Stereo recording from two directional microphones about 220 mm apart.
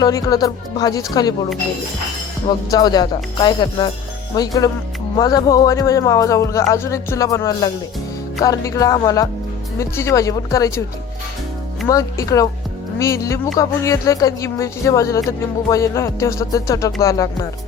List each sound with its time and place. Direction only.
0.0 s speech: 15° left (ahead or behind)
2.5 s speech: 20° left (ahead or behind)
11.9 s speech: 15° left (ahead or behind)